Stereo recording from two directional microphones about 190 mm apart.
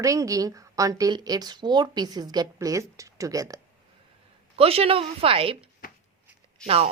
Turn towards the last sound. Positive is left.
turn(degrees=-30)  # may be behind; listen again after turning